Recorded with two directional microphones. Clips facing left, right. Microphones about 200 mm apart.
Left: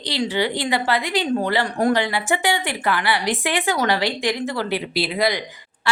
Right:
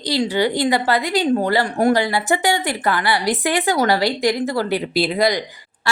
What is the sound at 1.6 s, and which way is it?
A woman's voice, 25° right (ahead or behind).